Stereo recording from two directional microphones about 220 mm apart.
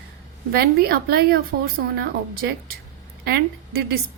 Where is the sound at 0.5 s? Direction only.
45° right (ahead or behind).